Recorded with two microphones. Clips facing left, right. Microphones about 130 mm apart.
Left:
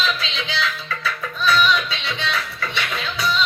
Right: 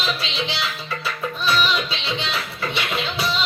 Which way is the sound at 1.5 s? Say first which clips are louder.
Left 4 dB; 25° right (ahead or behind).